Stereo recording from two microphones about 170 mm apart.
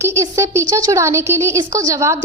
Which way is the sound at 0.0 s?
15° right (ahead or behind).